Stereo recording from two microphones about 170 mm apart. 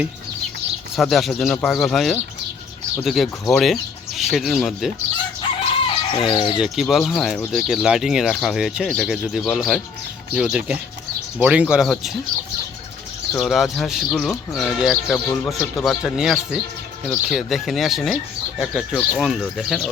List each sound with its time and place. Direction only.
0.9 s speech: centre (ahead or behind)
6.1 s speech: 30° left (ahead or behind)
6.6 s speech: centre (ahead or behind)
13.3 s speech: centre (ahead or behind)